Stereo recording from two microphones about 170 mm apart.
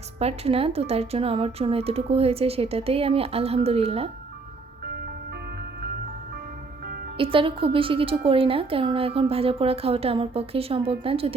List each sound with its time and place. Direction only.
0.2 s a woman's voice: 35° right (ahead or behind)
7.2 s a woman's voice: 30° right (ahead or behind)